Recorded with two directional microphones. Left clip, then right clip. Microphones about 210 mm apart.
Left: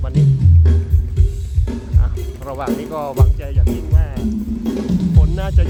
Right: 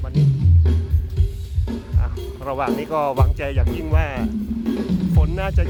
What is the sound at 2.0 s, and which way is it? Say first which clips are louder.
Speech: even; 5° right (ahead or behind).